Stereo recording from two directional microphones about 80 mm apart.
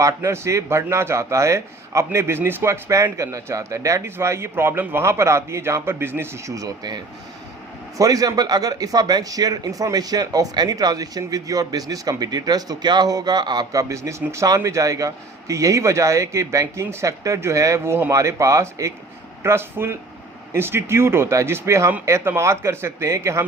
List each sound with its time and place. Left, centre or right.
0.0 s a man's voice: right
6.5 s speech: right
13.7 s a man's voice: right